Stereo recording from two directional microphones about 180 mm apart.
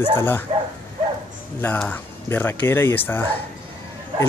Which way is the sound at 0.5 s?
30° right (ahead or behind).